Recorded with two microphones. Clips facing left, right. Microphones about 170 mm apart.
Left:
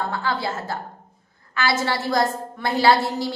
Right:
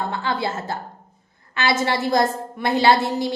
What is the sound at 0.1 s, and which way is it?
A woman's voice, 20° right (ahead or behind).